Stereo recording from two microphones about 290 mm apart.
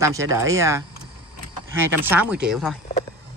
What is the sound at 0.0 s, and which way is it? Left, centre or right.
Speech, centre.